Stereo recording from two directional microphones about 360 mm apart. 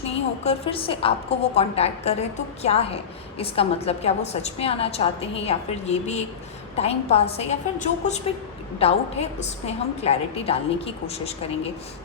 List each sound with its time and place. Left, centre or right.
0.4 s a woman's voice: centre